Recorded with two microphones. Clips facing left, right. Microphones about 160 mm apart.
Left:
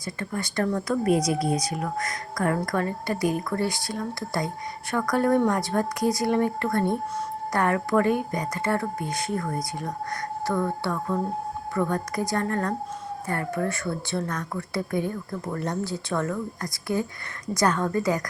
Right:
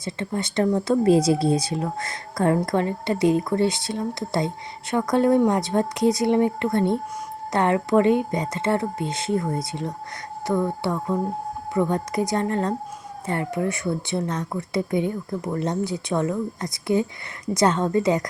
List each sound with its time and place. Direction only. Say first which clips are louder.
0.0 s speech: right 4 dB; 25° right (ahead or behind)